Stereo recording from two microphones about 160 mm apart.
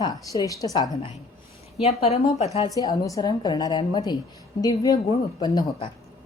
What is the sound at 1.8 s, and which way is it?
Speech, 40° left (ahead or behind).